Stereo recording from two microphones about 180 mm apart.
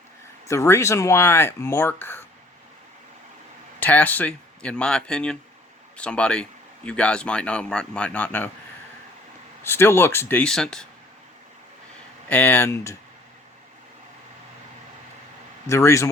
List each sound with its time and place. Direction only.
0.4 s speech: 15° left (ahead or behind)
3.8 s speech: 10° left (ahead or behind)
9.6 s speech: 15° left (ahead or behind)
12.3 s speech: 10° left (ahead or behind)
15.6 s speech: 15° left (ahead or behind)